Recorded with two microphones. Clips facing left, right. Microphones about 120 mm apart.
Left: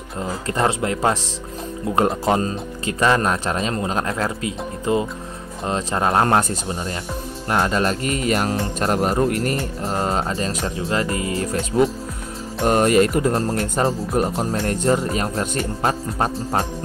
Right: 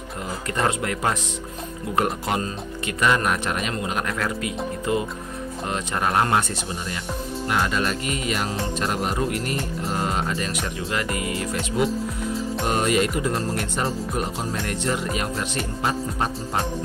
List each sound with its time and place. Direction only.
0.2 s speech: 30° left (ahead or behind)
7.4 s speech: 35° left (ahead or behind)
12.6 s speech: 45° left (ahead or behind)